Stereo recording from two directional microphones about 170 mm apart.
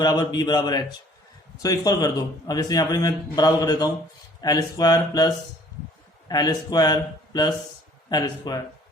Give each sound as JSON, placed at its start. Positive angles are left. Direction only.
{"t": 0.0, "sound": "a man's voice", "side_deg": 25}